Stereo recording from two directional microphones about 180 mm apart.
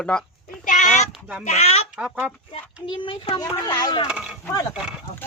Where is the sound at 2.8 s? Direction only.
25° left (ahead or behind).